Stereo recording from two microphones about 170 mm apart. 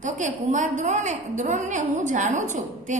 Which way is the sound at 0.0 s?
45° right (ahead or behind).